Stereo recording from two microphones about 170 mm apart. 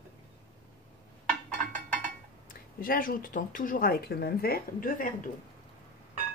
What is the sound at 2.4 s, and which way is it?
Speech, 55° left (ahead or behind).